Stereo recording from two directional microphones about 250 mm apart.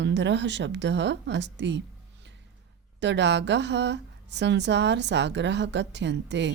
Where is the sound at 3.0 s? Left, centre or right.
Right.